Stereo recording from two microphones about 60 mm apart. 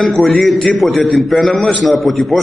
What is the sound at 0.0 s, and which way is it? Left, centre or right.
A man's voice, centre.